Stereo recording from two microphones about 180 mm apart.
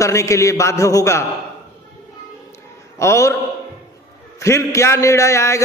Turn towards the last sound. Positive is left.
turn(degrees=15)  # may be behind; listen again after turning